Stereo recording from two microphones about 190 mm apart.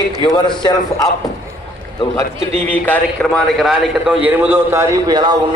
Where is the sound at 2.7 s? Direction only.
5° left (ahead or behind); by 5.3 s 20° right (ahead or behind).